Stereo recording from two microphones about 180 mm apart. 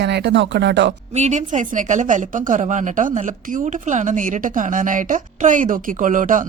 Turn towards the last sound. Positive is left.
turn(degrees=-45)  # may be behind; listen again after turning